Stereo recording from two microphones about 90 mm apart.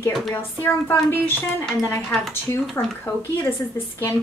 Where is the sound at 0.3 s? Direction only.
25° left (ahead or behind).